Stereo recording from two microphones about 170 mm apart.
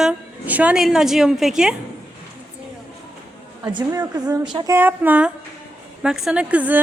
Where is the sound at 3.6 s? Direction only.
20° right (ahead or behind).